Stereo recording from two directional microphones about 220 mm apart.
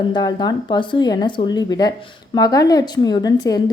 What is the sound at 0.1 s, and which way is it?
A woman's voice, 20° left (ahead or behind).